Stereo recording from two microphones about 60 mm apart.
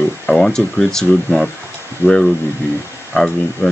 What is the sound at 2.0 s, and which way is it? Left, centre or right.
Speech, centre.